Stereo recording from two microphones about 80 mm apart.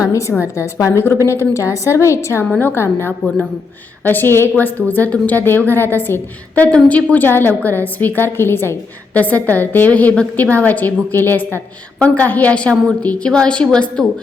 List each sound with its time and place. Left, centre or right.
0.0 s a woman's voice: left
6.6 s a woman's voice: centre